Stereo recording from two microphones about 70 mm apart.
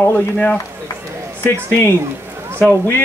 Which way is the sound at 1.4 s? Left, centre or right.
Left.